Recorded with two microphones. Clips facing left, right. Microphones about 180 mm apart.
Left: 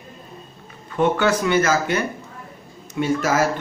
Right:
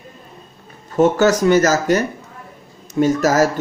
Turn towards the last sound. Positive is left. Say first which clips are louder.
# right 5 dB
turn(degrees=-45)  # may be behind; listen again after turning